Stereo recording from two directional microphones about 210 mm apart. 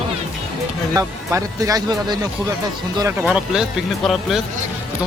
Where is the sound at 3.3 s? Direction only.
5° right (ahead or behind).